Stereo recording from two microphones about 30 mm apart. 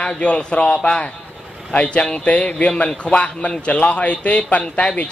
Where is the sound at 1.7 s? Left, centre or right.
Left.